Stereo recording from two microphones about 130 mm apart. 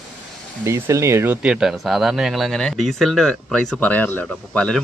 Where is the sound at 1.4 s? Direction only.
5° right (ahead or behind).